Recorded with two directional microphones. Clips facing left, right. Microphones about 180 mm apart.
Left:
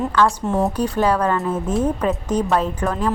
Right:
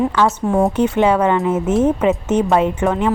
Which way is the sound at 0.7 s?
25° right (ahead or behind).